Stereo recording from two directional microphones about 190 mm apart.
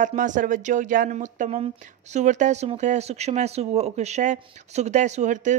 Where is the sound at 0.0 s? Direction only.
40° right (ahead or behind).